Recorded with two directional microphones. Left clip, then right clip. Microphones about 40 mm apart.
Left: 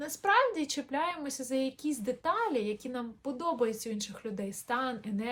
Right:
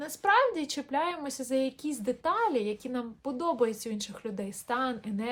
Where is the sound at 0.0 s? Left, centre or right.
Right.